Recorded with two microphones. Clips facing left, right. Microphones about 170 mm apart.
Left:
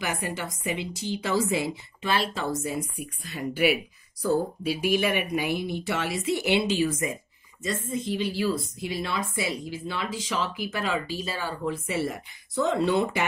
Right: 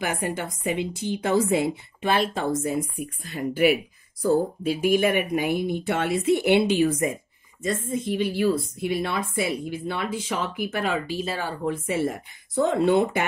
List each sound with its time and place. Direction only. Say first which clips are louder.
0.0 s speech: right 3 dB; 55° right (ahead or behind)